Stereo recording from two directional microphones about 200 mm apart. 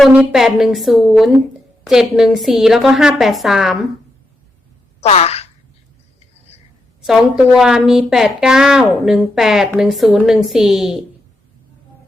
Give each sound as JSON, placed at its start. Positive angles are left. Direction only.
{"t": 0.0, "sound": "a woman's voice", "side_deg": -5}
{"t": 4.9, "sound": "speech", "side_deg": 30}
{"t": 7.0, "sound": "a woman's voice", "side_deg": 0}